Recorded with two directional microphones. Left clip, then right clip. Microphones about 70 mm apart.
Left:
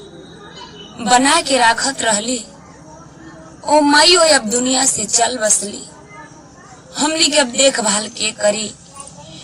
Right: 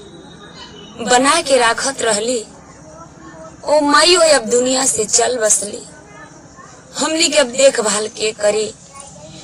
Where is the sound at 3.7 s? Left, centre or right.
Right.